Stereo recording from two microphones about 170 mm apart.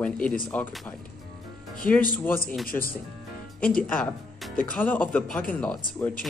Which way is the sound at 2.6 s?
55° left (ahead or behind).